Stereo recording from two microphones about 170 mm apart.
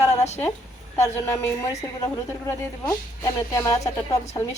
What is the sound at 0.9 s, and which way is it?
Speech, 15° left (ahead or behind).